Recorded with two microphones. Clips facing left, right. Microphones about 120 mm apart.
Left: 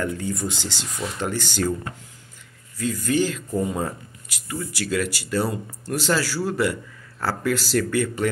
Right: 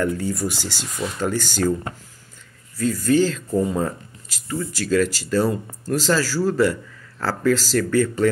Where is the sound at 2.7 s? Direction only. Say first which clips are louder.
Right 4 dB; 15° left (ahead or behind).